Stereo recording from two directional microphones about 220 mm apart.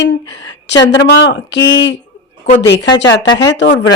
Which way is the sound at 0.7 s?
55° left (ahead or behind).